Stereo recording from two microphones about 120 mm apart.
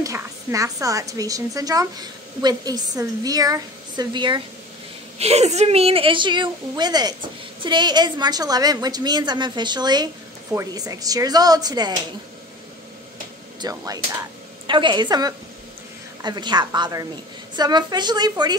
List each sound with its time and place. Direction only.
0.0 s a woman's voice: 25° right (ahead or behind)
5.2 s a woman's voice: 65° right (ahead or behind); by 12.0 s 35° right (ahead or behind)
13.6 s a woman's voice: 30° right (ahead or behind)